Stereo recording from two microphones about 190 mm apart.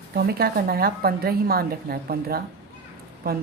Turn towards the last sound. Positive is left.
turn(degrees=-55)  # may be behind; listen again after turning